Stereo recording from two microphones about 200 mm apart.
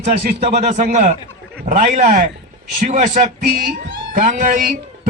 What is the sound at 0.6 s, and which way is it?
A man's voice, 35° right (ahead or behind).